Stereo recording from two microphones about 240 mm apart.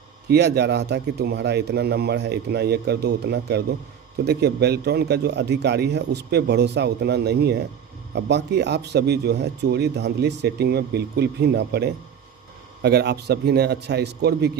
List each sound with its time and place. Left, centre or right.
0.3 s speech: right